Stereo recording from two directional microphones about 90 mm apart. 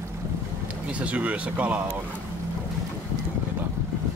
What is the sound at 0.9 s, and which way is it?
Speech, 15° right (ahead or behind).